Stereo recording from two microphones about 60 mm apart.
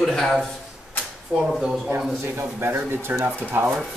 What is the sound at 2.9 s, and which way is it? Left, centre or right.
Speech, right.